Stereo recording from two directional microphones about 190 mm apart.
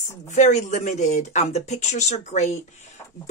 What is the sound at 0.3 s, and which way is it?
Speech, 35° left (ahead or behind).